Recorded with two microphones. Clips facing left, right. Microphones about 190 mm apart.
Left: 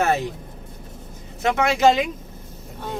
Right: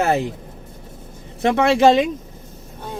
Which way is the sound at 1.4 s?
30° right (ahead or behind).